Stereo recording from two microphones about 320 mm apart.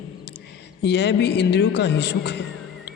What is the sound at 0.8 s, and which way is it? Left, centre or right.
Mantra, left.